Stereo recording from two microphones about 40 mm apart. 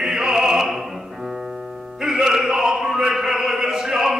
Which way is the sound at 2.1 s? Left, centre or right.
Centre.